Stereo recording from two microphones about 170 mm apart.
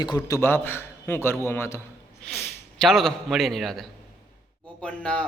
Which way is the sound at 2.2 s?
Centre (ahead or behind).